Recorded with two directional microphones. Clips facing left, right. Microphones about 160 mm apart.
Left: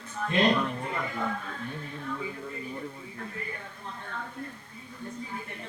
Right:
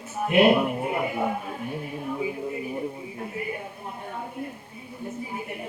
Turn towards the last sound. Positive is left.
turn(degrees=-15)  # may be behind; listen again after turning